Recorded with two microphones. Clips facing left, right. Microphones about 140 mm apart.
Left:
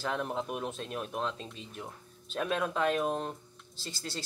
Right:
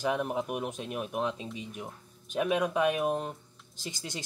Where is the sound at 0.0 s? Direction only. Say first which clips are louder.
Right 4 dB; 10° right (ahead or behind).